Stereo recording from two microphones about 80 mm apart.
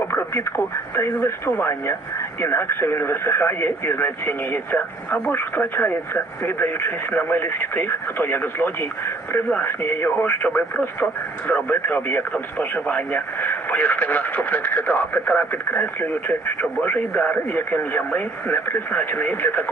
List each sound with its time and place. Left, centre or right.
0.0 s speech: left